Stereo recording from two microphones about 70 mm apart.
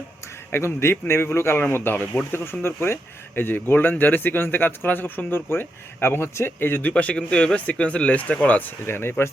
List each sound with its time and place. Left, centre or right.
0.5 s speech: left
6.9 s speech: centre; by 9.3 s left